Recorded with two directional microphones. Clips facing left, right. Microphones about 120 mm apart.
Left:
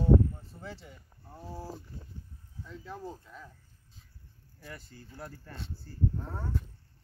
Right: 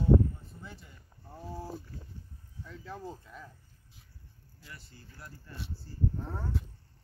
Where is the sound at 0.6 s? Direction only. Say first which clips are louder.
Left 7 dB; 90° left.